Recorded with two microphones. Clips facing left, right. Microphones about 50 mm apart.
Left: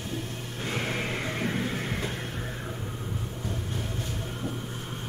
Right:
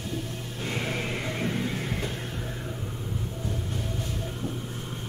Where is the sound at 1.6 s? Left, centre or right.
Left.